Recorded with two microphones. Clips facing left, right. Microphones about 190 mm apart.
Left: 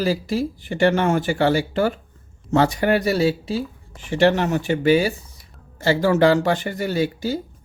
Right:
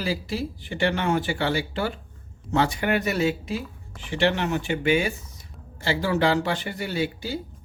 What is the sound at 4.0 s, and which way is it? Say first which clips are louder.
Speech: left 6 dB; 45° left (ahead or behind).